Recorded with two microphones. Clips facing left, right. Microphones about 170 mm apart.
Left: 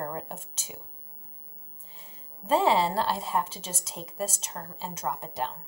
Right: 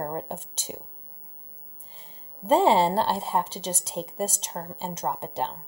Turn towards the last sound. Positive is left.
turn(degrees=-30)  # may be behind; listen again after turning